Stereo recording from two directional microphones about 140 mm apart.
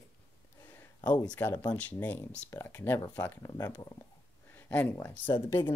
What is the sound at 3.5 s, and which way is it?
Speech, 25° left (ahead or behind).